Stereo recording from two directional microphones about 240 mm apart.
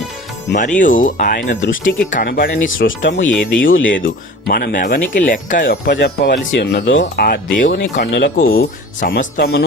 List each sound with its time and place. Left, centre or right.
0.8 s speech: left
3.0 s speech: left
4.0 s speech: left